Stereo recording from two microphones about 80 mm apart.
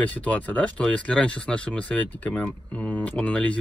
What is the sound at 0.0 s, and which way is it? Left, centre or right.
Speech, centre.